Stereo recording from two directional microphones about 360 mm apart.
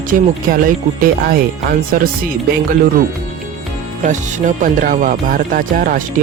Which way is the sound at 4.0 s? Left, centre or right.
Right.